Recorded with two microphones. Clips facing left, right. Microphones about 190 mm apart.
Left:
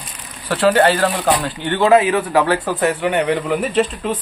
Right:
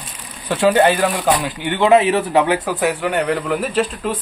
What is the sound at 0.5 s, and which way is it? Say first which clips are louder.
Speech: even; 15° right (ahead or behind).